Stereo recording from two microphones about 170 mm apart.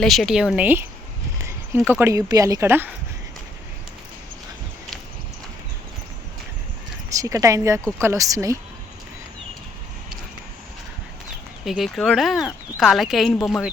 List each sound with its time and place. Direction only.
0.0 s speech: centre (ahead or behind)
1.5 s a sound: 10° right (ahead or behind)
2.0 s speech: 15° right (ahead or behind)
7.1 s speech: 20° right (ahead or behind)
11.6 s speech: centre (ahead or behind)